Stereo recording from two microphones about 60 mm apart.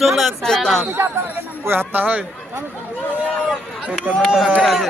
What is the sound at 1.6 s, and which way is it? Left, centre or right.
Speech, right.